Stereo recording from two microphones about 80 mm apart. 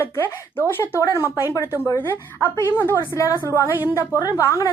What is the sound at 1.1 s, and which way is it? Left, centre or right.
Speech, left.